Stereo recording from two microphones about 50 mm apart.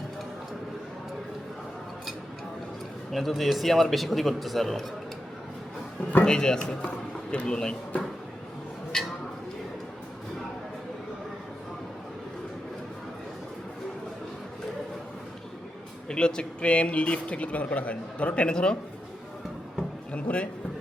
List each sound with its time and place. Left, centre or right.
3.1 s a man's voice: centre
6.2 s a man's voice: centre
6.8 s a sound: left
7.4 s speech: centre
16.0 s speech: centre
20.1 s a man's voice: left